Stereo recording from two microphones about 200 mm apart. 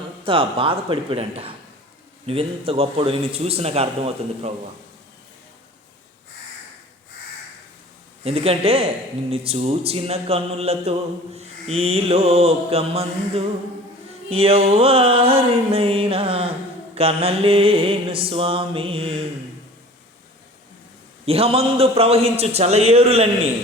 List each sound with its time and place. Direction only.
0.3 s a man's voice: 25° right (ahead or behind)
8.2 s a man's voice: 30° right (ahead or behind)
11.3 s mantra: 30° right (ahead or behind)
14.3 s a man's voice: 30° right (ahead or behind)
21.2 s mantra: 30° right (ahead or behind)